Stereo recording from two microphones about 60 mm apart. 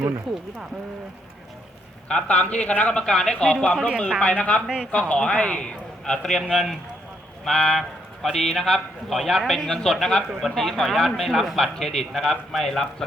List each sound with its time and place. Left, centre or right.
2.0 s speech: centre
3.1 s a man's voice: centre
4.6 s speech: centre
4.9 s a man's voice: centre